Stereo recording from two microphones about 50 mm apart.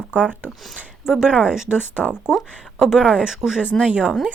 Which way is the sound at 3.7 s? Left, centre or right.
Right.